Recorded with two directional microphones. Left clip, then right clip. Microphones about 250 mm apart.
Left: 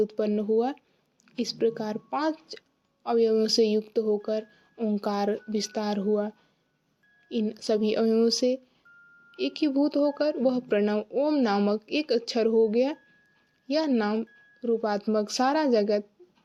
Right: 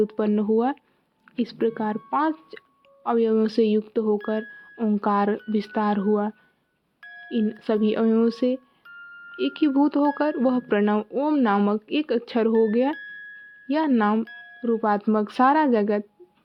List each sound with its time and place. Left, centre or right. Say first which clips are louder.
0.0 s a woman's voice: right 3 dB; centre